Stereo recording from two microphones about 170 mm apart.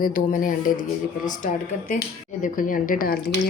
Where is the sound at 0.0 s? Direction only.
55° left (ahead or behind).